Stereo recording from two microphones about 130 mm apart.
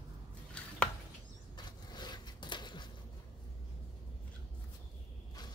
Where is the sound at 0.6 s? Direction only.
10° left (ahead or behind).